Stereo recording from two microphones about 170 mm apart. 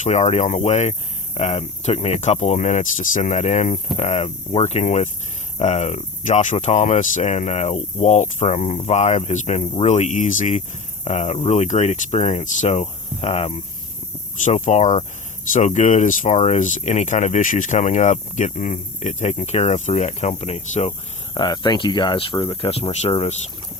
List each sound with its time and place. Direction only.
0.0 s speech: 40° left (ahead or behind)
21.3 s speech: 25° left (ahead or behind)